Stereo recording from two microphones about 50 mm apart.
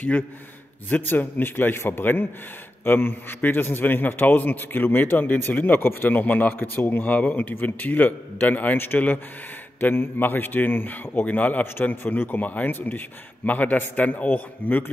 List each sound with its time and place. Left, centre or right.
0.8 s a man's voice: left
11.2 s speech: left